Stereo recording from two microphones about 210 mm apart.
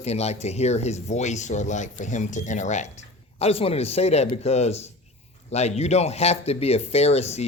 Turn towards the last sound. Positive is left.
turn(degrees=30)  # may be behind; listen again after turning